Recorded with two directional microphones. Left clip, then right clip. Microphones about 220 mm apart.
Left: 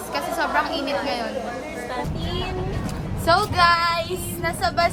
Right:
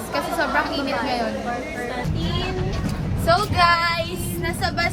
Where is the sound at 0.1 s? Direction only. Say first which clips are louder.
Right 1 dB; 10° left (ahead or behind).